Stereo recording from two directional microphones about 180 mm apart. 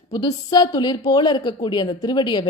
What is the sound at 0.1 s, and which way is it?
A woman's voice, 25° left (ahead or behind).